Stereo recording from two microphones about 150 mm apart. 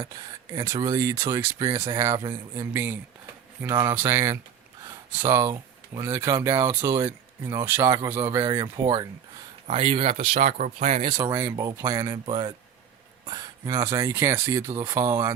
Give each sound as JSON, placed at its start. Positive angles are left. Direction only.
{"t": 0.0, "sound": "speech", "side_deg": -25}
{"t": 2.7, "sound": "speech", "side_deg": -15}
{"t": 9.6, "sound": "speech", "side_deg": -40}
{"t": 10.3, "sound": "speech", "side_deg": -55}
{"t": 11.2, "sound": "speech", "side_deg": -20}